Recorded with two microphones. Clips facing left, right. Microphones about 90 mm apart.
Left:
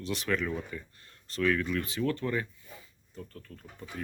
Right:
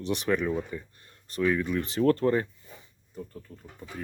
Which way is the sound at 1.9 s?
40° right (ahead or behind).